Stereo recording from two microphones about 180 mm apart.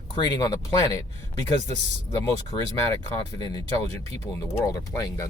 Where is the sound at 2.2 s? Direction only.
15° left (ahead or behind).